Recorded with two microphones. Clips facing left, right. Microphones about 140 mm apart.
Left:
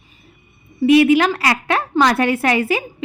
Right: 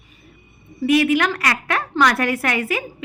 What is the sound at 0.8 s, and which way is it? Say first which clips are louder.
Speech: left 5 dB; 25° left (ahead or behind).